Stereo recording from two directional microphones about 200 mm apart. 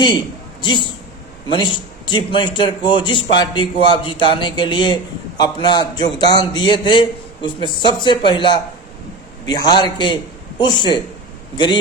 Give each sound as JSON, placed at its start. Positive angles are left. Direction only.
{"t": 0.6, "sound": "a man's voice", "side_deg": 25}